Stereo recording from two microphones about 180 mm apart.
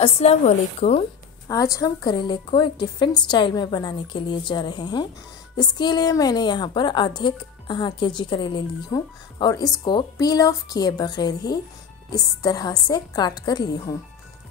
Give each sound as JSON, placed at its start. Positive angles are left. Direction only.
{"t": 0.0, "sound": "a woman's voice", "side_deg": 35}
{"t": 1.5, "sound": "a woman's voice", "side_deg": 20}